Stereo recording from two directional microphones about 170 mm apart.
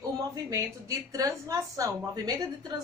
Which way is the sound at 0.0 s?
20° right (ahead or behind).